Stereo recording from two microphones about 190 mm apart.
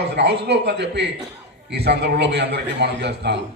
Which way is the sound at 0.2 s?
65° right (ahead or behind).